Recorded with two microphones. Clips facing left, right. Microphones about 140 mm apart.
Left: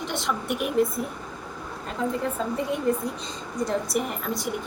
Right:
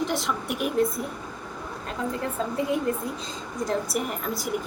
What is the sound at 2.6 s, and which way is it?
A woman's voice, centre (ahead or behind).